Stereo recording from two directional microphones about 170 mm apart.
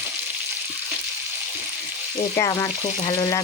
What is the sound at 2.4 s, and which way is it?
Frying, 20° left (ahead or behind).